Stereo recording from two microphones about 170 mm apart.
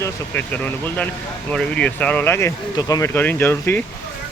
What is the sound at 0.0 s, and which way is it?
Speech, 10° left (ahead or behind).